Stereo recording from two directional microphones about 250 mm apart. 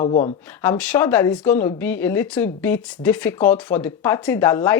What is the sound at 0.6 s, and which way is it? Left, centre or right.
Speech, centre.